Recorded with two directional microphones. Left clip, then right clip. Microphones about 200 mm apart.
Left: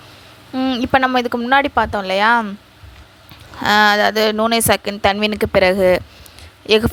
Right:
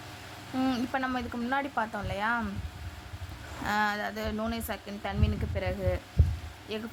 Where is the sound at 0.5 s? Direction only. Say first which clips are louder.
Left 10 dB; 30° left (ahead or behind).